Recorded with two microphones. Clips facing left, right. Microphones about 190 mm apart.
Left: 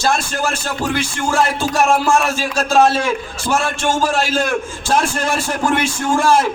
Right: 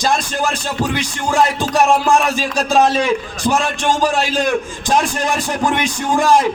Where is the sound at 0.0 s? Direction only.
15° right (ahead or behind).